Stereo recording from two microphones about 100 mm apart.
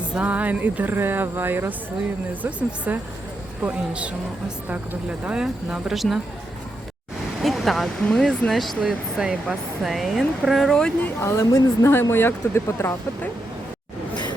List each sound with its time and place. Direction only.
0.1 s a woman's voice: 15° right (ahead or behind)
7.4 s speech: centre (ahead or behind)
11.0 s speech: 25° left (ahead or behind)